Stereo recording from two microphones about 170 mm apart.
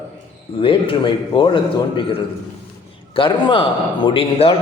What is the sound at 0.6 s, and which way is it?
A man's voice, 30° left (ahead or behind).